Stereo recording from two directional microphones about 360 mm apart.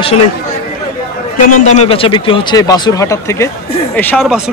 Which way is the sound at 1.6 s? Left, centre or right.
Centre.